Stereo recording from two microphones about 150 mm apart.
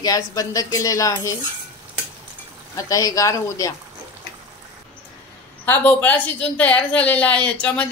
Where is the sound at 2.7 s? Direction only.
25° left (ahead or behind).